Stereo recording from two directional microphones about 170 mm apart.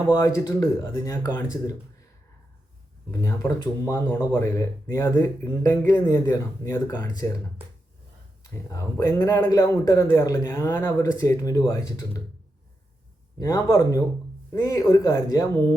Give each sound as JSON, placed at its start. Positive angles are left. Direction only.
{"t": 0.1, "sound": "speech", "side_deg": 15}
{"t": 3.1, "sound": "speech", "side_deg": 15}
{"t": 8.4, "sound": "a man's voice", "side_deg": 20}
{"t": 13.4, "sound": "a man's voice", "side_deg": 15}